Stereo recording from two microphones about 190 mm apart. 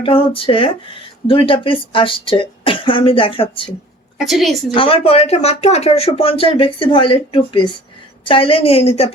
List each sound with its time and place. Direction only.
0.0 s speech: 30° left (ahead or behind)
4.3 s a woman's voice: centre (ahead or behind)
4.7 s a woman's voice: 30° left (ahead or behind)